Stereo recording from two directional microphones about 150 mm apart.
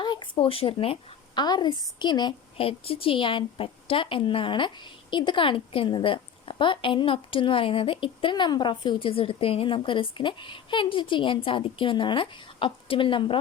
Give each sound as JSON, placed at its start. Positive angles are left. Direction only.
{"t": 0.0, "sound": "a woman's voice", "side_deg": 30}